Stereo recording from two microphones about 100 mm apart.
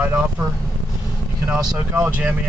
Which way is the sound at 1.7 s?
20° right (ahead or behind).